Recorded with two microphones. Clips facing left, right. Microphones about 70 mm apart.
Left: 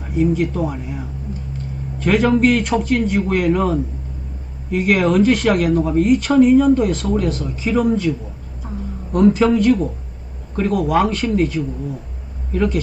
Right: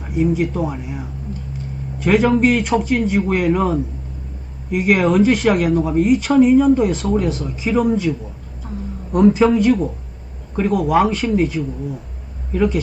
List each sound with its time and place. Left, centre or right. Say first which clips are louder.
0.2 s speech: even; centre
4.8 s speech: right 1 dB; centre
9.2 s speech: even; centre